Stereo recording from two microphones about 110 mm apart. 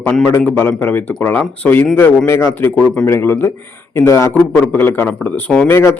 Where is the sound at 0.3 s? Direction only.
20° left (ahead or behind).